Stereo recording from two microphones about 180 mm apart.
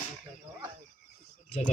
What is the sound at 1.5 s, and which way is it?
Speech, 35° left (ahead or behind).